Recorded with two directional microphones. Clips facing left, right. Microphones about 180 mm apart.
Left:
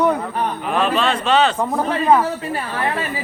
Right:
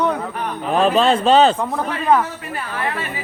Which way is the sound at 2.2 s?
35° left (ahead or behind).